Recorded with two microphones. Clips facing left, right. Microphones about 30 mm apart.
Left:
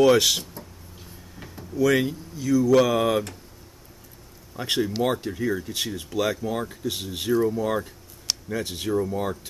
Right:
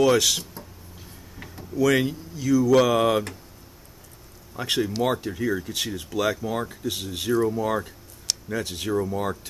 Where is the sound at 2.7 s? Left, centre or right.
Centre.